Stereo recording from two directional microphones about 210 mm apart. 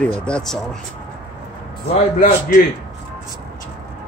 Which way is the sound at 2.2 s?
40° left (ahead or behind).